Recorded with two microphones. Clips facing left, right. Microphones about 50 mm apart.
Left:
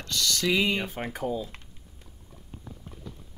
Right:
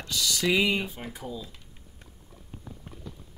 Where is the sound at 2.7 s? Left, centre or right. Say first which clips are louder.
Even; centre.